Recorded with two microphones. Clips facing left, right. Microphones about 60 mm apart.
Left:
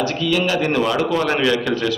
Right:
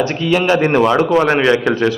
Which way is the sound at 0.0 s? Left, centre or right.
Right.